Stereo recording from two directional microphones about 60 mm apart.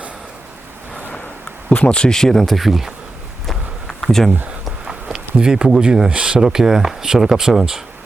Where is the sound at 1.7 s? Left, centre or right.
Centre.